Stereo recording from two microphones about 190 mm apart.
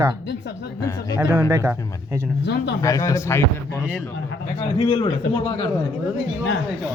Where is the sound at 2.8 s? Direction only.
15° left (ahead or behind).